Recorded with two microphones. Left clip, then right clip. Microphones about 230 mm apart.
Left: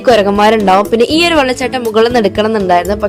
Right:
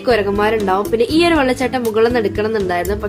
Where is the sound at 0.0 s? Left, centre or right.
Left.